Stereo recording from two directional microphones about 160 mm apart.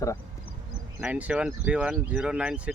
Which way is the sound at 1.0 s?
10° right (ahead or behind).